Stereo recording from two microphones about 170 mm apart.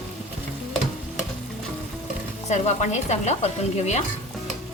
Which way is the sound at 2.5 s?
45° left (ahead or behind).